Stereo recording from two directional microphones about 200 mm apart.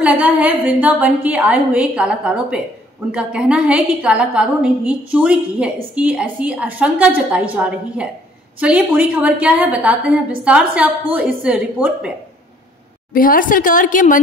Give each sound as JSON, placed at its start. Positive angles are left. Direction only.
{"t": 0.0, "sound": "a woman's voice", "side_deg": -5}
{"t": 13.1, "sound": "a woman's voice", "side_deg": 45}